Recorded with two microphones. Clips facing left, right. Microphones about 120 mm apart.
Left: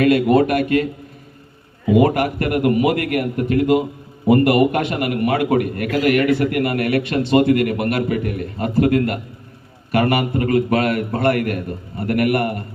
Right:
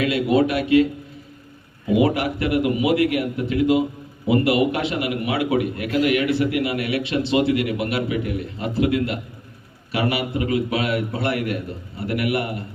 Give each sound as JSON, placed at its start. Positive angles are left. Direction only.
{"t": 0.0, "sound": "a man's voice", "side_deg": 50}
{"t": 2.0, "sound": "a man's voice", "side_deg": 50}